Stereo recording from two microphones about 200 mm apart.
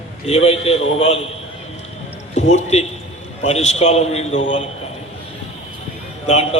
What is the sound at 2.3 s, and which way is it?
A man's voice, 35° left (ahead or behind).